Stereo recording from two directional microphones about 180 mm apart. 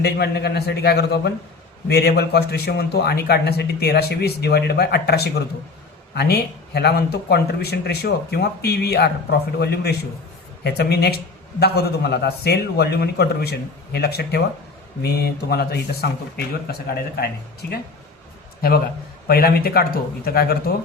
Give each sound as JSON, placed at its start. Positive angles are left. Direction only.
{"t": 0.0, "sound": "a man's voice", "side_deg": 65}
{"t": 19.3, "sound": "a man's voice", "side_deg": 60}